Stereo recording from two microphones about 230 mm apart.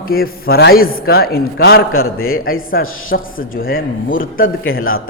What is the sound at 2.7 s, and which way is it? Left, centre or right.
Speech, left.